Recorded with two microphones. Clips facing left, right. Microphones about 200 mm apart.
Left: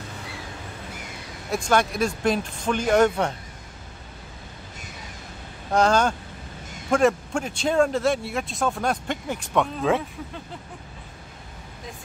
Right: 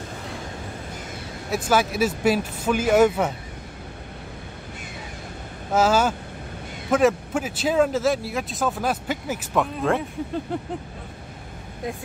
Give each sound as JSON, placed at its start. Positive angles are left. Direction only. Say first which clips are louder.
{"t": 1.5, "sound": "speech", "louder": "right 1 dB", "side_deg": -5}
{"t": 5.7, "sound": "speech", "louder": "even", "side_deg": -5}
{"t": 10.5, "sound": "vehicle", "louder": "right 11 dB", "side_deg": -60}